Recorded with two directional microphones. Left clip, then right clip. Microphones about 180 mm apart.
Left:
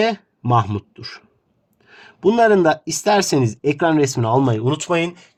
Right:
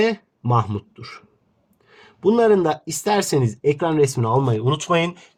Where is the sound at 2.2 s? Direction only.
40° left (ahead or behind).